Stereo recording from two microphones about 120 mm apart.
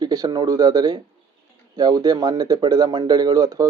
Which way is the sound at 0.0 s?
35° right (ahead or behind).